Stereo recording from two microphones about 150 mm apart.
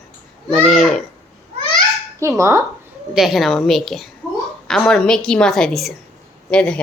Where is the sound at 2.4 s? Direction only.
20° right (ahead or behind).